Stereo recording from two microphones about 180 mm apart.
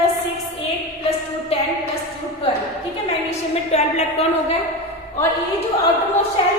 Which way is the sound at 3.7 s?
35° left (ahead or behind).